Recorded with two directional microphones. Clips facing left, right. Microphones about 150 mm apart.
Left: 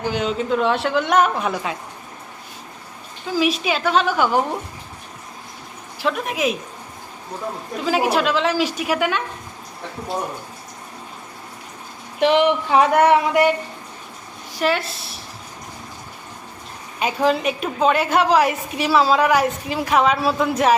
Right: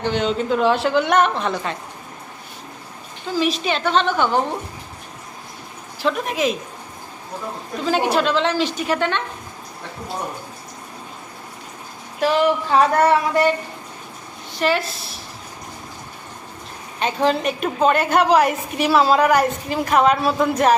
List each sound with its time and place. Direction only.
0.0 s a woman's voice: 5° left (ahead or behind)
3.2 s a woman's voice: 5° left (ahead or behind)
6.0 s a woman's voice: centre (ahead or behind)
7.9 s a woman's voice: 5° left (ahead or behind)
12.2 s a sound: 20° left (ahead or behind)
14.6 s a woman's voice: centre (ahead or behind)
17.0 s a woman's voice: 5° left (ahead or behind)